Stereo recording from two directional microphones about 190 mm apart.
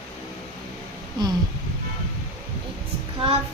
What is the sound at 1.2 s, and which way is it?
Speech, 20° right (ahead or behind).